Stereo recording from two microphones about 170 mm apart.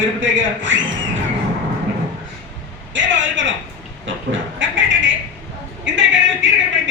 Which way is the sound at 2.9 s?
90° right.